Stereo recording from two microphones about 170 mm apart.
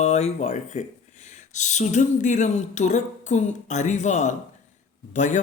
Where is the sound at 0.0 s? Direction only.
40° left (ahead or behind).